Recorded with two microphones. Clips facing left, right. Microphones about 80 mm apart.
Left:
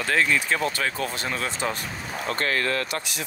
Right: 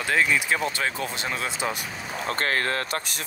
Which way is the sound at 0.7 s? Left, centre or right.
Right.